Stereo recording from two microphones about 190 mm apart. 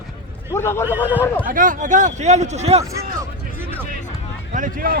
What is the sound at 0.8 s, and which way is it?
Speech, 10° right (ahead or behind).